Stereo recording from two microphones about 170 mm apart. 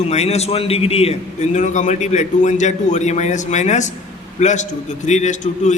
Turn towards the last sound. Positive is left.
turn(degrees=45)  # may be behind; listen again after turning